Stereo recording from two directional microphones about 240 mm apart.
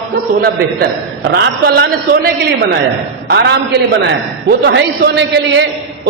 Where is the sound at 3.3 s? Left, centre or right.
Right.